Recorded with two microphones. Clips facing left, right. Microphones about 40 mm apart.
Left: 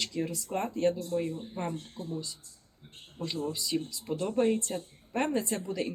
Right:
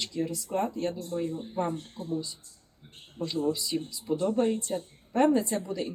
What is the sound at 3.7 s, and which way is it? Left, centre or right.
Speech, centre.